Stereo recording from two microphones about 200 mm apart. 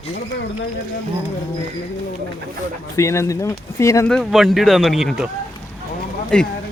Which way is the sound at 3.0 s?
15° left (ahead or behind).